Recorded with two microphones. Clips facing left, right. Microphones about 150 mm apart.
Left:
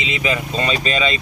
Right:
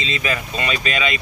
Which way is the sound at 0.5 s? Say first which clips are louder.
Left 3 dB; 30° left (ahead or behind).